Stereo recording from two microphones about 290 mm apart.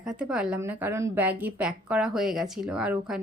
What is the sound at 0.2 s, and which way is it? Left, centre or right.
A woman's voice, centre.